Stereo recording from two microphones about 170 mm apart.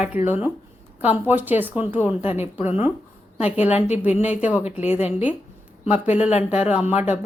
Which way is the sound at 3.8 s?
40° left (ahead or behind).